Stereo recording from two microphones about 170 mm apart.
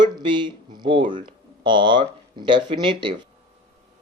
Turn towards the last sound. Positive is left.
turn(degrees=-30)  # may be behind; listen again after turning